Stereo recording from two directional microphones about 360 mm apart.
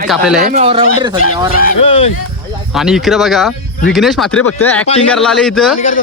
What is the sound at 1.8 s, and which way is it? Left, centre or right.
Speech, centre.